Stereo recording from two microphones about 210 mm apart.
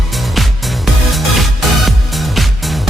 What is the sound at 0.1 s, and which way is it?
Music, centre (ahead or behind).